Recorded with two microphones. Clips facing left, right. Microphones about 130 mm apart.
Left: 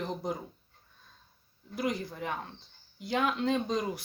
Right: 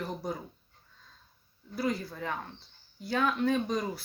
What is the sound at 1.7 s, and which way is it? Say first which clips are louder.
Speech: right 1 dB; 20° left (ahead or behind).